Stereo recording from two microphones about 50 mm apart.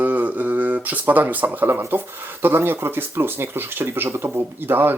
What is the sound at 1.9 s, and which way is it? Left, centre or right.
Speech, right.